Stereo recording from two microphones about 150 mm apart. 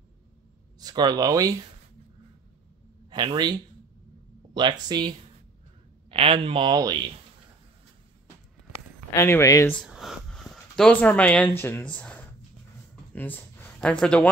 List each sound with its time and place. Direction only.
0.7 s speech: 25° right (ahead or behind)
3.1 s a man's voice: 30° right (ahead or behind)
9.1 s speech: 15° left (ahead or behind)
9.8 s speech: centre (ahead or behind)